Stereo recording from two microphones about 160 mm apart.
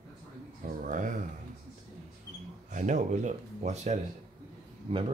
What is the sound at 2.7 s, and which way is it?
Speech, 50° right (ahead or behind).